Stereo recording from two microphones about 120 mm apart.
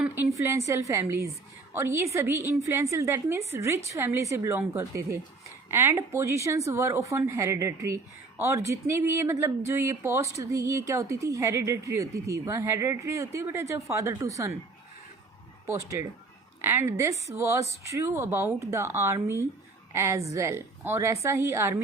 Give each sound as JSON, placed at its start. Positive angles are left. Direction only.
{"t": 0.0, "sound": "speech", "side_deg": -20}
{"t": 15.6, "sound": "speech", "side_deg": -25}